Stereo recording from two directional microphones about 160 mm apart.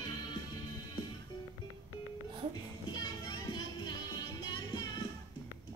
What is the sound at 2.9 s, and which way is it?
Music, 25° left (ahead or behind).